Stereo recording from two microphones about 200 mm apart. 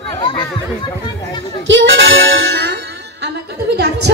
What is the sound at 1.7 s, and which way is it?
Music, 70° right (ahead or behind).